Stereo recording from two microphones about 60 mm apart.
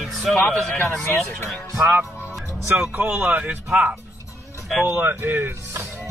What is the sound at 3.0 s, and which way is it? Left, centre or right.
Speech, right.